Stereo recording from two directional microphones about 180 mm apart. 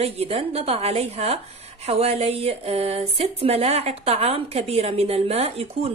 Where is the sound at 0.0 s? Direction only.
35° right (ahead or behind).